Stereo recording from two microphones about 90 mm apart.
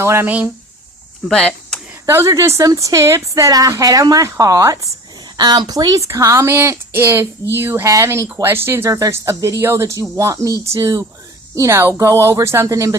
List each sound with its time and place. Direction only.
0.0 s speech: 30° right (ahead or behind)
1.3 s speech: 10° left (ahead or behind)
2.0 s speech: 30° right (ahead or behind)
5.4 s speech: 50° right (ahead or behind)